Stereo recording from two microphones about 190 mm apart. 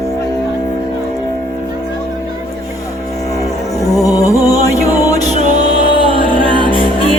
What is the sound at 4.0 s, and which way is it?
Music, 20° left (ahead or behind).